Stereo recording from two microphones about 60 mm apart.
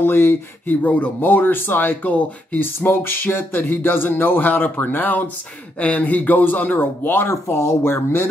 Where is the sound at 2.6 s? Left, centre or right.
Left.